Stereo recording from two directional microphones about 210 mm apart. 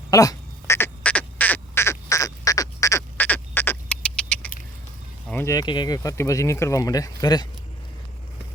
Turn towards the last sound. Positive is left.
turn(degrees=20)  # may be behind; listen again after turning